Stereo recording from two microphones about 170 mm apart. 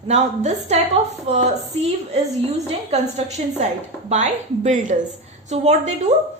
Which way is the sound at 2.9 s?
40° right (ahead or behind).